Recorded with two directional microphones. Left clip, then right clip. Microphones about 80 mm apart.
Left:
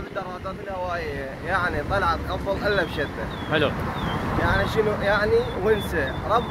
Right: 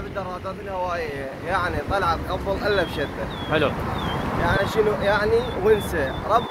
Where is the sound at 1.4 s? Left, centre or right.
Centre.